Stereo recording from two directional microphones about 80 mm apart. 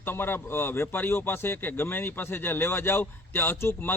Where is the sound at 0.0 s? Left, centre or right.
Left.